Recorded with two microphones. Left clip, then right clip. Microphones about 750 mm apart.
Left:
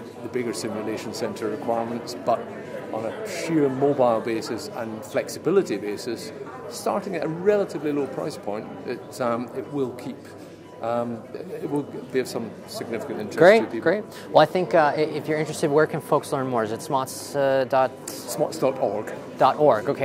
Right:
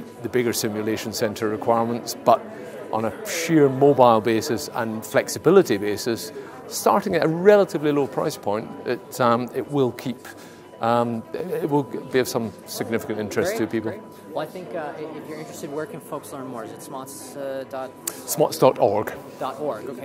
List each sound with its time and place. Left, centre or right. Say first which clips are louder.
0.3 s a man's voice: right 5 dB; right
13.8 s speech: left 9 dB; left
18.3 s a man's voice: right 6 dB; right
19.4 s speech: left 10 dB; left